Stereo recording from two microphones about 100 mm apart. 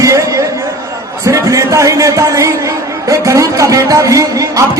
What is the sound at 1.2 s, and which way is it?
A man's voice, 35° right (ahead or behind).